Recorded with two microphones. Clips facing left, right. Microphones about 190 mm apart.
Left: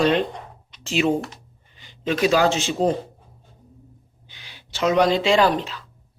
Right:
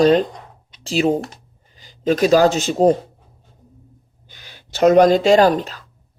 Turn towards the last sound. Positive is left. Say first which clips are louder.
# right 5 dB
turn(degrees=-45)  # may be behind; listen again after turning